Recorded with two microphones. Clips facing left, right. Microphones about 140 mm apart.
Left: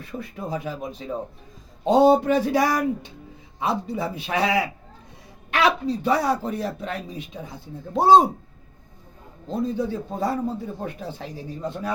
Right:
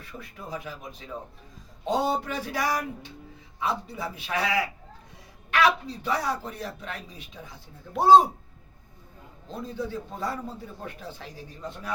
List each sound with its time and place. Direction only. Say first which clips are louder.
0.2 s a man's voice: left 7 dB; 25° left (ahead or behind)
7.9 s a man's voice: left 2 dB; 20° left (ahead or behind)
9.5 s a man's voice: left 8 dB; 25° left (ahead or behind)